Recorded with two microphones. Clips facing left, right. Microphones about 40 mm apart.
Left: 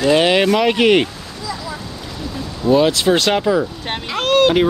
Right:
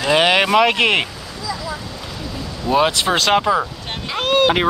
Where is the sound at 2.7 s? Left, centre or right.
Right.